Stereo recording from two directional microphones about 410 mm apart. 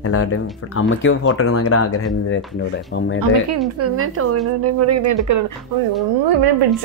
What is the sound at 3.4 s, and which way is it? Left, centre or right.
A woman's voice, right.